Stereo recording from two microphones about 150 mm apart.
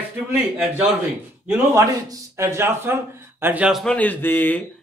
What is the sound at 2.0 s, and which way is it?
Speech, 15° right (ahead or behind).